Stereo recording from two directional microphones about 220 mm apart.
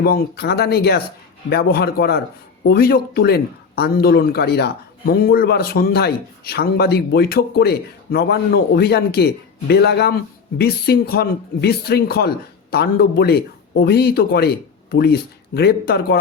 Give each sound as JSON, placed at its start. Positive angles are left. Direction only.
{"t": 0.0, "sound": "speech", "side_deg": 45}